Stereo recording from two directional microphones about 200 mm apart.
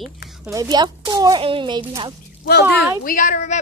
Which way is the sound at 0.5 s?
20° right (ahead or behind).